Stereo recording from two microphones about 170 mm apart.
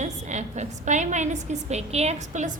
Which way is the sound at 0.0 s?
45° right (ahead or behind).